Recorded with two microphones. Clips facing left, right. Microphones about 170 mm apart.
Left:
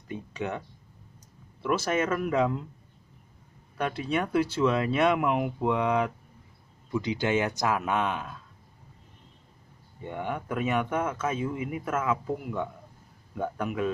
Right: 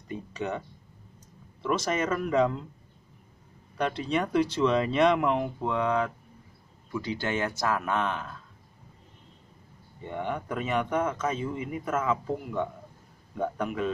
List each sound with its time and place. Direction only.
0.1 s speech: centre (ahead or behind)
3.7 s speech: 5° left (ahead or behind)
10.0 s speech: 5° left (ahead or behind)